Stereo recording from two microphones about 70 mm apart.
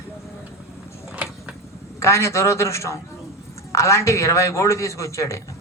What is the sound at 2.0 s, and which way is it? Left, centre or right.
A man's voice, left.